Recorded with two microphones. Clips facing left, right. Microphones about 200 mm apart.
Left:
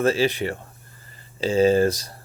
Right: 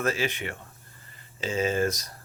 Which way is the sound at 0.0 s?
30° left (ahead or behind).